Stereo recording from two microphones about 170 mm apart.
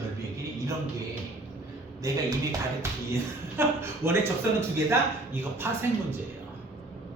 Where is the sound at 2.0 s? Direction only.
20° right (ahead or behind).